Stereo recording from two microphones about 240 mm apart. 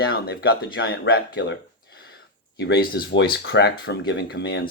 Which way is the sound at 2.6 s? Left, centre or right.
Left.